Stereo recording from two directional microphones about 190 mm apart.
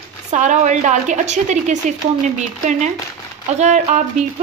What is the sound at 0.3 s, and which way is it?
A woman's voice, 40° right (ahead or behind).